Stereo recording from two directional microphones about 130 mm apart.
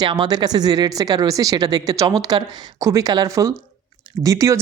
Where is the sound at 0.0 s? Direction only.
35° right (ahead or behind).